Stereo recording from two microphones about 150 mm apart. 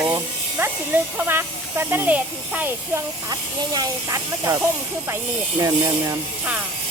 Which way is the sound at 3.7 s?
25° right (ahead or behind).